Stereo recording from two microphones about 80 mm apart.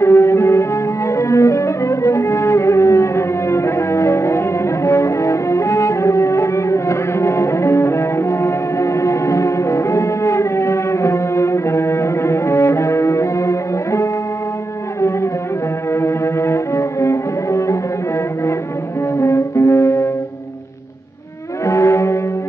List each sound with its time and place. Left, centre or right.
0.0 s music: left
15.9 s cello: left
19.1 s music: left
21.6 s music: left